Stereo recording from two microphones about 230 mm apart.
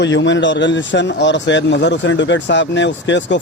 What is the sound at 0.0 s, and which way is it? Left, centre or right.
Speech, left.